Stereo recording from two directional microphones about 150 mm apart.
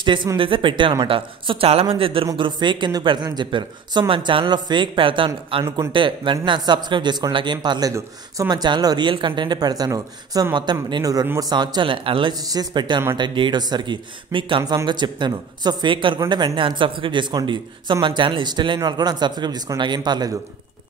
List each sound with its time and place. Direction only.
0.0 s speech: 30° right (ahead or behind)
5.6 s speech: 25° right (ahead or behind)